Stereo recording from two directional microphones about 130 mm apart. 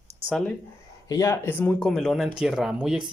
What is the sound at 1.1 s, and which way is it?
Speech, 25° left (ahead or behind).